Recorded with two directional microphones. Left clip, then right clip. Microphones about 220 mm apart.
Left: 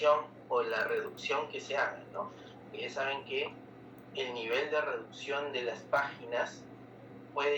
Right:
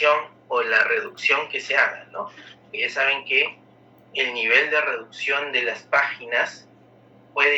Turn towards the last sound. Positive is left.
turn(degrees=-90)